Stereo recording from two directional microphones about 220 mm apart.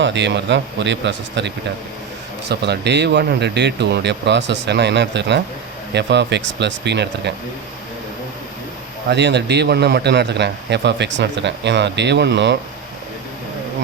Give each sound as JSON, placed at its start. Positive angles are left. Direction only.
{"t": 0.0, "sound": "a man's voice", "side_deg": -55}
{"t": 9.0, "sound": "a man's voice", "side_deg": -50}